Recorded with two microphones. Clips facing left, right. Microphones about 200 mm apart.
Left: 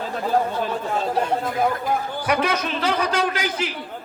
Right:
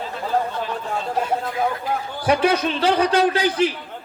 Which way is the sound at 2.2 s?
30° right (ahead or behind).